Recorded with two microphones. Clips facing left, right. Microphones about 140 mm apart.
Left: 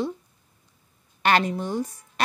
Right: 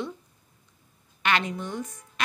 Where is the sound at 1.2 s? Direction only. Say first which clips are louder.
Left 5 dB; 40° left (ahead or behind).